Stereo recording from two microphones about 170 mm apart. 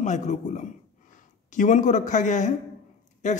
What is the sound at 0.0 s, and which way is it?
Speech, 45° left (ahead or behind).